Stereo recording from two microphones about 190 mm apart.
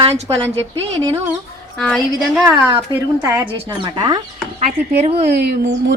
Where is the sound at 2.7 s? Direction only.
20° right (ahead or behind).